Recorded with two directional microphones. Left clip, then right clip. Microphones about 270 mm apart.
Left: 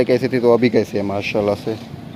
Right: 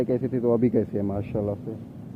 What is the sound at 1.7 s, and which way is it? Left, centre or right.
Speech, left.